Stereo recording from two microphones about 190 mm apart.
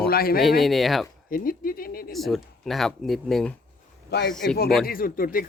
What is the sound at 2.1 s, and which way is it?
Speech, centre (ahead or behind).